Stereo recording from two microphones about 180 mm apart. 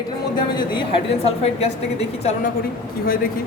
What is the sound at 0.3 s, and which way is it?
A woman's voice, 25° left (ahead or behind).